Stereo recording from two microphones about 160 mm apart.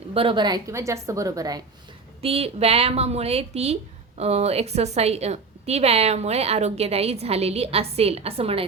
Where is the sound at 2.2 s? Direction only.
35° right (ahead or behind).